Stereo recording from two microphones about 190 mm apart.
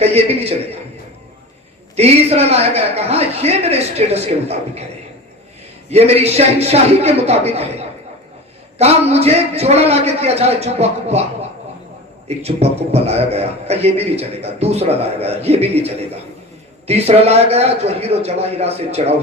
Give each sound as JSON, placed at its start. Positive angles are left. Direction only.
{"t": 0.0, "sound": "a sound", "side_deg": -35}
{"t": 2.0, "sound": "a man's voice", "side_deg": -35}
{"t": 5.9, "sound": "a man's voice", "side_deg": -35}
{"t": 9.1, "sound": "a man's voice", "side_deg": -35}
{"t": 12.4, "sound": "a man's voice", "side_deg": -35}
{"t": 16.8, "sound": "a man's voice", "side_deg": -35}